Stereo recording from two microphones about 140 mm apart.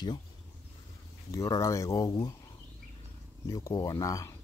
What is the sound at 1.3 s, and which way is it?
Speech, 20° left (ahead or behind).